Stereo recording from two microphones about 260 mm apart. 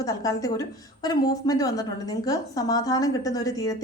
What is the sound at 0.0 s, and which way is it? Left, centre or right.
A woman's voice, centre.